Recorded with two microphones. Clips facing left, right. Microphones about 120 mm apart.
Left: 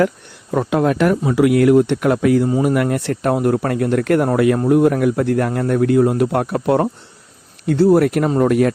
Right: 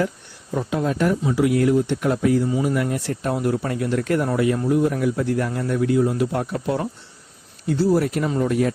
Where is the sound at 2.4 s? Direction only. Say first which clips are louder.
Left 5 dB; 45° left (ahead or behind).